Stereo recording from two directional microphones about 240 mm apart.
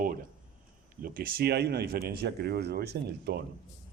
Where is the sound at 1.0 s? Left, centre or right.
Right.